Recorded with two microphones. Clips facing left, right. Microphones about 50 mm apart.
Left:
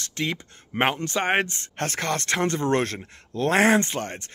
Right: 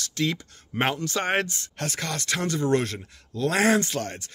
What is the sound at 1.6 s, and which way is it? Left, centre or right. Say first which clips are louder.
Speech: left 3 dB; left.